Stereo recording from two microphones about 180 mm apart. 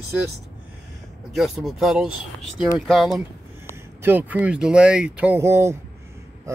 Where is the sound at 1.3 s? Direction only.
Centre (ahead or behind).